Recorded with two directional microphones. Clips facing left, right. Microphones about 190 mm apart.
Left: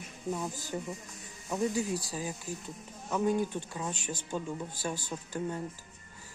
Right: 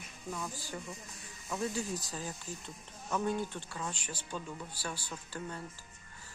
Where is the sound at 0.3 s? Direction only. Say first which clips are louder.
Left 6 dB; 25° left (ahead or behind).